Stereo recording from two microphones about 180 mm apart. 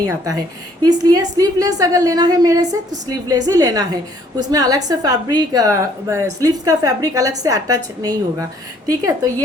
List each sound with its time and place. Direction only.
0.0 s a woman's voice: 20° right (ahead or behind)